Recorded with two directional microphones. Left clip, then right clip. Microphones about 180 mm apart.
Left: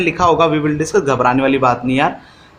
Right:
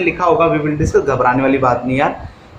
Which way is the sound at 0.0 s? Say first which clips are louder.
Even; 55° left (ahead or behind).